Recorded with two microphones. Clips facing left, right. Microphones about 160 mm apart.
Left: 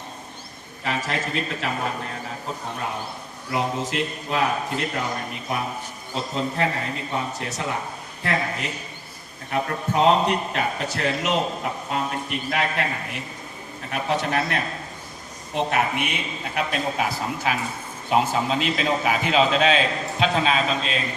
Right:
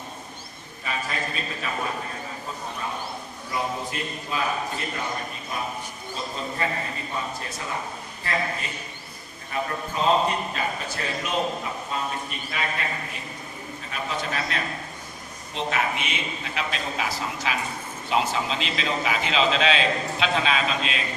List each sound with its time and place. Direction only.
0.9 s a man's voice: 80° left
3.5 s a man's voice: 80° left; by 21.0 s 40° left (ahead or behind)